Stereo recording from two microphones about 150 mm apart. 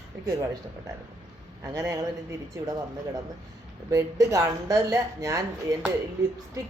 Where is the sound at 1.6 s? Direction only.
20° right (ahead or behind).